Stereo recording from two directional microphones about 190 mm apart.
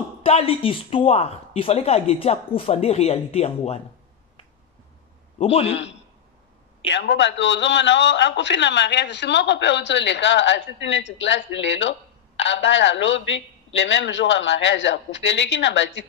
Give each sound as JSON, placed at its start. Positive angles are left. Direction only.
{"t": 0.2, "sound": "speech", "side_deg": 30}
{"t": 5.4, "sound": "speech", "side_deg": 35}
{"t": 6.9, "sound": "a man's voice", "side_deg": 65}